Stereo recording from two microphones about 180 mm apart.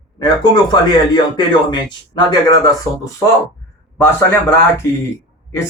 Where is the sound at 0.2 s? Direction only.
25° left (ahead or behind).